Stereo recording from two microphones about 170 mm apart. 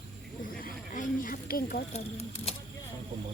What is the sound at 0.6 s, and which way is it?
Speech, 50° left (ahead or behind).